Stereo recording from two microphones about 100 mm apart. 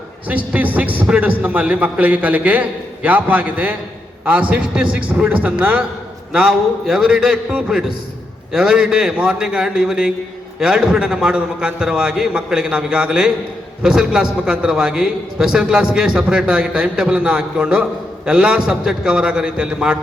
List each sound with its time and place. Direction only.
0.3 s a man's voice: 15° right (ahead or behind)